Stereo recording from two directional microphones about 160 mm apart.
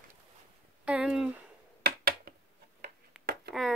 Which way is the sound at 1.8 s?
75° right (ahead or behind).